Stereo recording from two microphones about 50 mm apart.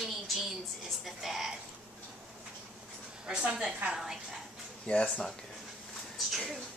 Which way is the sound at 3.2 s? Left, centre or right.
Centre.